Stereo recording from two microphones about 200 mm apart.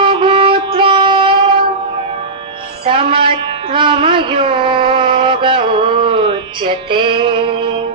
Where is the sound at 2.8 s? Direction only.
25° right (ahead or behind).